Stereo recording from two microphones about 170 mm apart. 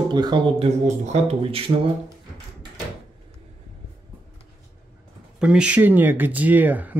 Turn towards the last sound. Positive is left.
turn(degrees=-10)  # may be behind; listen again after turning